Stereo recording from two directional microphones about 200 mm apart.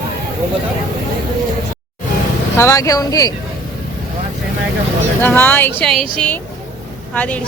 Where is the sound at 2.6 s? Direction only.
15° left (ahead or behind).